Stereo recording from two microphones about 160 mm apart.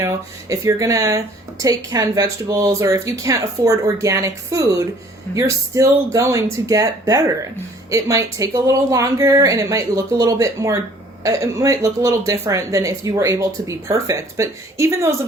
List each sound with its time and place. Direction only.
0.0 s speech: 20° right (ahead or behind)